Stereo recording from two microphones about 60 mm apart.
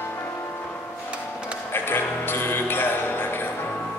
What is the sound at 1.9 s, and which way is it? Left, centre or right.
Music, left.